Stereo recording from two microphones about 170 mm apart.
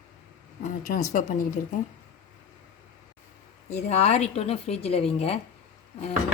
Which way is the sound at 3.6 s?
40° left (ahead or behind).